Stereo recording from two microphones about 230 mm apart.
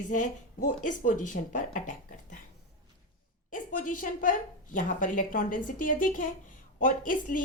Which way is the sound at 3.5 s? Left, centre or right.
Left.